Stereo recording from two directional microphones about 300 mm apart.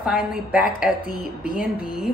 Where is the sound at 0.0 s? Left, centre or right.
Centre.